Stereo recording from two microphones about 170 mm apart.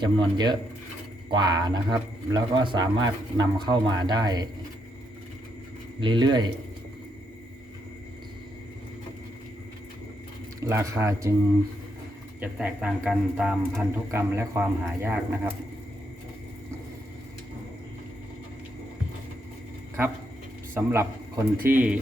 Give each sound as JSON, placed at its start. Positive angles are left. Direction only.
{"t": 0.0, "sound": "speech", "side_deg": -25}
{"t": 6.0, "sound": "speech", "side_deg": -30}
{"t": 10.6, "sound": "speech", "side_deg": -15}
{"t": 12.4, "sound": "speech", "side_deg": -5}
{"t": 20.7, "sound": "a man's voice", "side_deg": -15}